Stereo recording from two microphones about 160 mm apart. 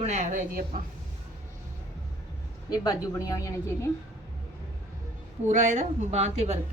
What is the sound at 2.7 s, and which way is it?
Speech, 25° left (ahead or behind).